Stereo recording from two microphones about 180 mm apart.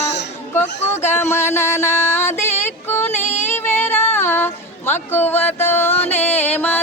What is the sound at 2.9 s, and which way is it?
Child singing, 15° left (ahead or behind).